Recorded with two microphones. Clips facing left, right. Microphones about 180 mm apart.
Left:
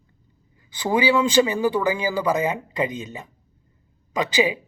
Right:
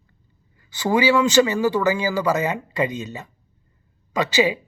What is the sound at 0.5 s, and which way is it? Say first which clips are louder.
Speech: right 2 dB; 15° left (ahead or behind).